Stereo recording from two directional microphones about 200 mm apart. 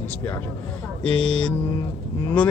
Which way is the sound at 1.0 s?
5° left (ahead or behind).